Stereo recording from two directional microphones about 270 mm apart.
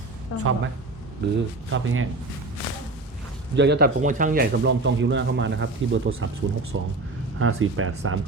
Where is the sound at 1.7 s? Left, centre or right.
Right.